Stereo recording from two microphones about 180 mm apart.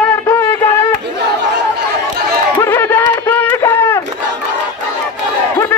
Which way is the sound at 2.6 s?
10° left (ahead or behind).